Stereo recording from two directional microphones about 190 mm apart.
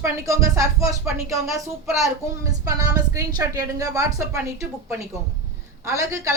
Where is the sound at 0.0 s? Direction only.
15° right (ahead or behind).